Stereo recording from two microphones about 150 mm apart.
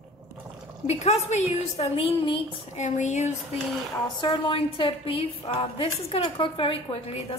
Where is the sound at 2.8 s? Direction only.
50° left (ahead or behind).